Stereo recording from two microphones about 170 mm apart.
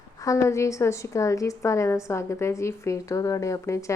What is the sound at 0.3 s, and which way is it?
A woman's voice, 15° left (ahead or behind).